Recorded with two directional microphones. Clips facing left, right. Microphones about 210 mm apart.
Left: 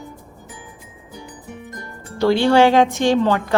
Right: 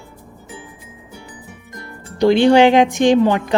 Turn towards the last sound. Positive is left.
turn(degrees=-15)  # may be behind; listen again after turning